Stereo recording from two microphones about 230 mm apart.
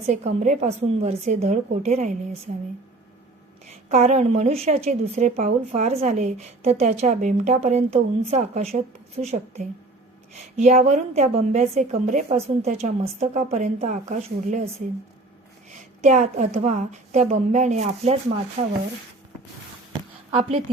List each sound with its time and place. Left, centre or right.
0.1 s a woman's voice: right
3.7 s a woman's voice: right
16.0 s a woman's voice: right